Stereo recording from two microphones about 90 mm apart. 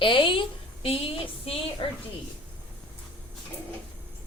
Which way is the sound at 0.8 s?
90° left.